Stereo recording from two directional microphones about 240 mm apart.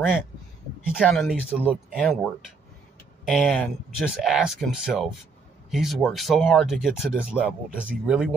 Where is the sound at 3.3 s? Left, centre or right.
Centre.